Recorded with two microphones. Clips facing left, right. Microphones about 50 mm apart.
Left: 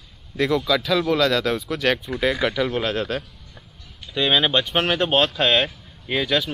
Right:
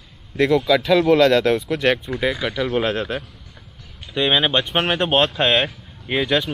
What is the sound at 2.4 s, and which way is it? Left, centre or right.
Speech, centre.